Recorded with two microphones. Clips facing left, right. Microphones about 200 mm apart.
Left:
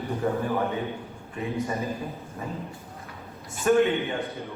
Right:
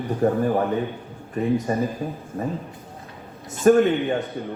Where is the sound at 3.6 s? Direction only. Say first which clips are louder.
Right 5 dB; 45° right (ahead or behind).